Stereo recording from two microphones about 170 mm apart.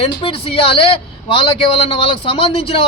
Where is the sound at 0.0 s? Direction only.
35° left (ahead or behind).